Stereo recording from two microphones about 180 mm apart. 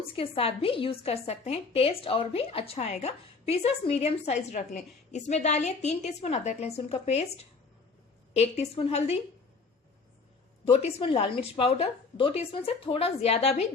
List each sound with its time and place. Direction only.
0.2 s a woman's voice: 30° left (ahead or behind)
8.3 s a woman's voice: 35° left (ahead or behind)
10.7 s a woman's voice: 30° left (ahead or behind)